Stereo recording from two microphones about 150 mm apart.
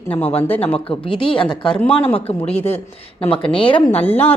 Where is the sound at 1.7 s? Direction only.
10° left (ahead or behind).